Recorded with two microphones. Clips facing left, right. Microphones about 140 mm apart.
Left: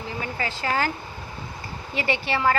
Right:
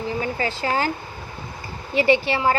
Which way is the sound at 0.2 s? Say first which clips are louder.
Right 4 dB; 30° right (ahead or behind).